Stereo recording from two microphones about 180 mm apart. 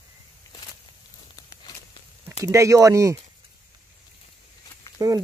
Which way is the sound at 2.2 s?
15° right (ahead or behind).